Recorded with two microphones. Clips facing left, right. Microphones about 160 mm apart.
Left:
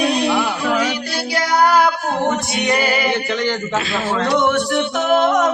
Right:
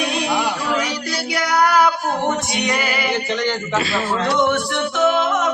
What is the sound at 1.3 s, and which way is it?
Female singing, 30° left (ahead or behind).